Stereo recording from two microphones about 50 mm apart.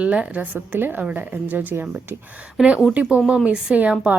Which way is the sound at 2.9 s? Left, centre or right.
Right.